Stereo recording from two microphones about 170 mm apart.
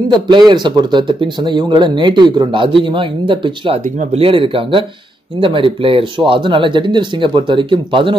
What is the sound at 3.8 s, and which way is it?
Speech, 45° right (ahead or behind).